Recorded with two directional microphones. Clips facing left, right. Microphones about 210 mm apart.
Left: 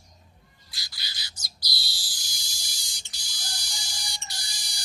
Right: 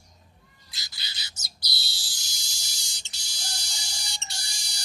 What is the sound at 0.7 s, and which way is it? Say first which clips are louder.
Bird: even; 25° right (ahead or behind).